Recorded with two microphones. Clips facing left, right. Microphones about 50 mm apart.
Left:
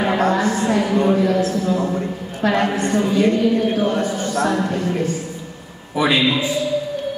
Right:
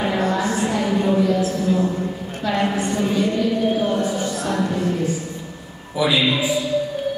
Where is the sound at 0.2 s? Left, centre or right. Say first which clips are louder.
Left 3 dB; left.